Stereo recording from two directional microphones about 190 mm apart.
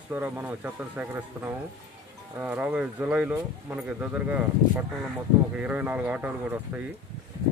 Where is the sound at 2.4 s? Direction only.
10° right (ahead or behind).